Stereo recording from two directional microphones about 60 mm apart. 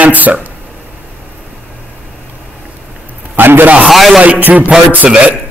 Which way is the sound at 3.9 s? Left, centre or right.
Centre.